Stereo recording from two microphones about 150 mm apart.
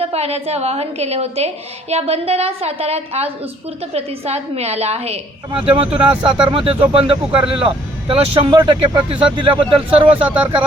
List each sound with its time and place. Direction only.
0.0 s a woman's voice: 45° right (ahead or behind)
10.2 s speech: 10° right (ahead or behind)